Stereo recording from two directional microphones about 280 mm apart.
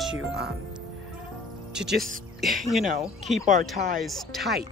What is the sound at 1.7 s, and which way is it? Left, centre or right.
Speech, centre.